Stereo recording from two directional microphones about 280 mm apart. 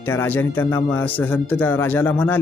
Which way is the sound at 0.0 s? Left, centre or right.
Centre.